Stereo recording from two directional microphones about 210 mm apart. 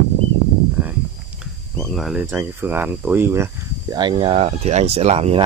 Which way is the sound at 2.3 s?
10° right (ahead or behind).